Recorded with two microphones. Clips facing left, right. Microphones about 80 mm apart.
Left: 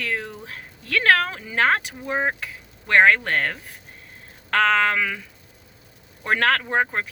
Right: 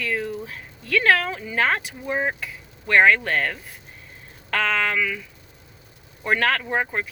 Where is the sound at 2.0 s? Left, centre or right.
Centre.